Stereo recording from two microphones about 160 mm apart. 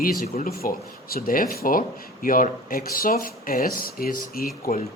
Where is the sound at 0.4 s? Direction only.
65° left (ahead or behind).